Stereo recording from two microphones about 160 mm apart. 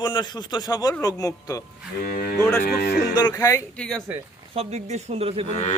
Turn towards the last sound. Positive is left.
turn(degrees=45)  # may be behind; listen again after turning